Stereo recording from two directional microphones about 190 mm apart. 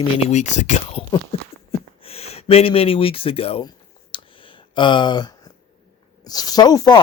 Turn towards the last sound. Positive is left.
turn(degrees=20)  # may be behind; listen again after turning